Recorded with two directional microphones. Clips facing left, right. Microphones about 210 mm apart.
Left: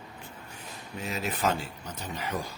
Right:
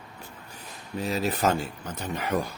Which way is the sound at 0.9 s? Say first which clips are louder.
Right 6 dB; 35° right (ahead or behind).